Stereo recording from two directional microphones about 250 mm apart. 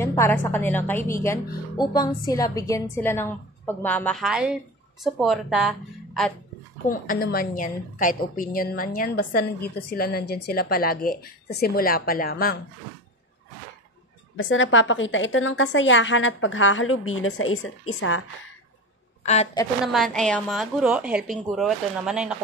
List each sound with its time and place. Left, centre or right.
0.0 s a woman's voice: centre
6.9 s a woman's voice: left
14.3 s a woman's voice: left
19.2 s a woman's voice: left
19.9 s a woman's voice: centre